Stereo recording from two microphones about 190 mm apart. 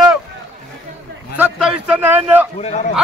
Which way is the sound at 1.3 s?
5° right (ahead or behind).